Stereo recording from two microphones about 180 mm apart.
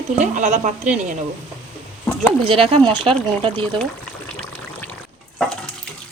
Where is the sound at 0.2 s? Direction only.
40° right (ahead or behind).